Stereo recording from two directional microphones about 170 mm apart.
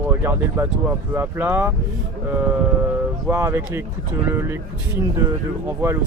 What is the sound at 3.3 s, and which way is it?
Speech, 15° right (ahead or behind).